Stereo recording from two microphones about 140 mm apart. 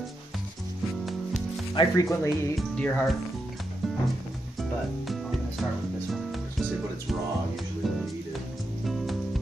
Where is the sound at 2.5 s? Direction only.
5° left (ahead or behind).